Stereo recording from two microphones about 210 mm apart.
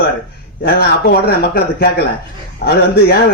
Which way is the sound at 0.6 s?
50° left (ahead or behind).